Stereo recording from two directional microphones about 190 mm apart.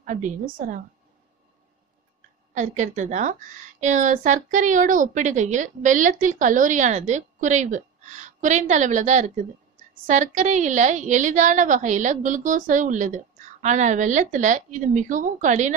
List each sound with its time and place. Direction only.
0.0 s a woman's voice: 40° right (ahead or behind)
2.5 s a woman's voice: 40° right (ahead or behind)